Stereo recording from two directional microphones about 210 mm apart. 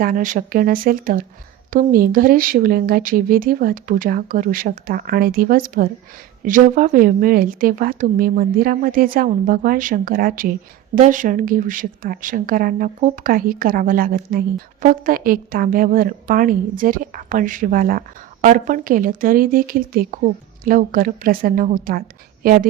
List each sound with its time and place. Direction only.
0.0 s a woman's voice: 40° right (ahead or behind)